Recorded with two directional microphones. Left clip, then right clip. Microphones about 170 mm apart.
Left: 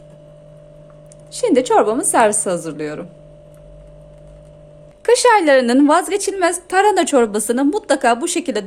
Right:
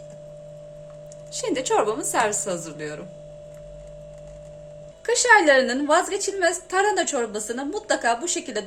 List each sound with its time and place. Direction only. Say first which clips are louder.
1.3 s a woman's voice: left 9 dB; 45° left (ahead or behind)
5.0 s a woman's voice: left 5 dB; 65° left (ahead or behind)